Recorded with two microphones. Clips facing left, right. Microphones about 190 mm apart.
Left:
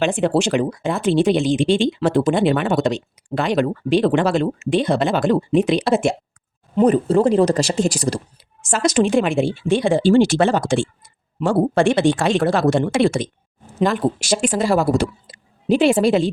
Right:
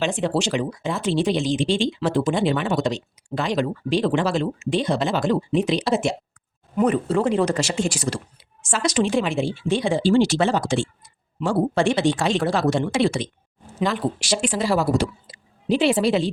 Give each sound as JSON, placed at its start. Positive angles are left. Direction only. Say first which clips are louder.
{"t": 0.0, "sound": "speech", "louder": "left 5 dB", "side_deg": 55}
{"t": 6.7, "sound": "speech", "louder": "left 5 dB", "side_deg": 35}